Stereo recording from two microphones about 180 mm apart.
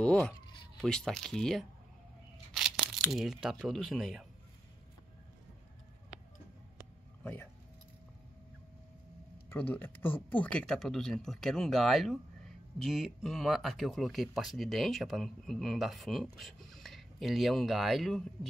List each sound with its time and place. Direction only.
0.0 s speech: 10° left (ahead or behind)
2.5 s tearing: centre (ahead or behind)
3.0 s speech: centre (ahead or behind)
9.5 s speech: 10° left (ahead or behind)